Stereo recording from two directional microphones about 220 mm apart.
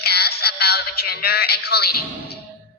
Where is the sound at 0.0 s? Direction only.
45° left (ahead or behind).